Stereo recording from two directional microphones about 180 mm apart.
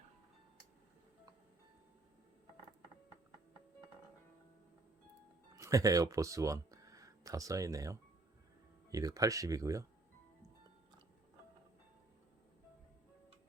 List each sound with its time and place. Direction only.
5.5 s speech: 20° right (ahead or behind)